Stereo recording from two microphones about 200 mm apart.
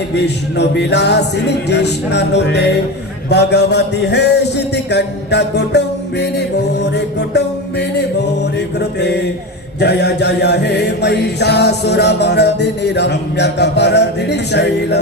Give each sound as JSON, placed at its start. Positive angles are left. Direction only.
{"t": 0.2, "sound": "music", "side_deg": 55}